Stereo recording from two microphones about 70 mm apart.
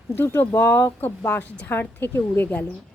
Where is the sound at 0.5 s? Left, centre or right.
Left.